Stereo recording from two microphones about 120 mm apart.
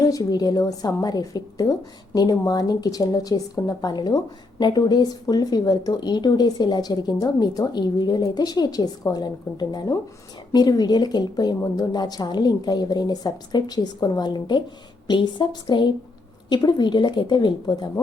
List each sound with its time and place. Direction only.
0.0 s a woman's voice: 30° left (ahead or behind)